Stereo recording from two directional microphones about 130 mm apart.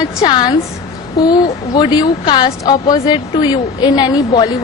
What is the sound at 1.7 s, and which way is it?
Speech, 35° left (ahead or behind).